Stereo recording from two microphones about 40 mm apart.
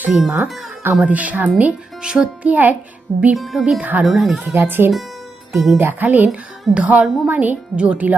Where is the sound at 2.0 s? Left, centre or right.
Centre.